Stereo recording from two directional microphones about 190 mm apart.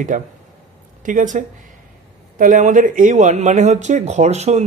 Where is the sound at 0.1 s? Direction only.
40° right (ahead or behind).